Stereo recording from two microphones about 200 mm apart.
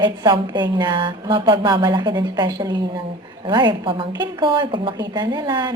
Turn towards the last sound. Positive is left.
turn(degrees=-20)  # may be behind; listen again after turning